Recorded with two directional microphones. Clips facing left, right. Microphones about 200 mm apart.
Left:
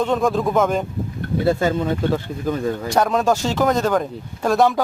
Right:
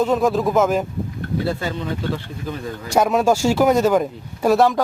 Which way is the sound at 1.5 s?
45° left (ahead or behind).